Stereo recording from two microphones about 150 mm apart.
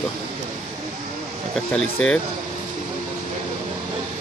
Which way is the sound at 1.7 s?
5° left (ahead or behind).